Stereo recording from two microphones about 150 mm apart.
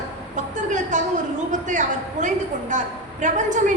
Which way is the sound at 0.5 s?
55° right (ahead or behind).